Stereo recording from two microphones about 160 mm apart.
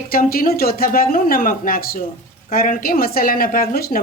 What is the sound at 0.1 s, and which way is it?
Speech, 65° left (ahead or behind).